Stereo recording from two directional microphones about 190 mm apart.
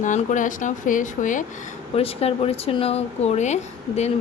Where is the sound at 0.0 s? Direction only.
40° left (ahead or behind).